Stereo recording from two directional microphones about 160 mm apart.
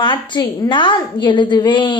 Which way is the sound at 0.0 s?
30° left (ahead or behind).